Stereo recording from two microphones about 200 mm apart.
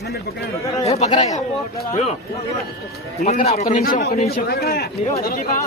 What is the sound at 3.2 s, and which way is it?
A man's voice, 40° left (ahead or behind).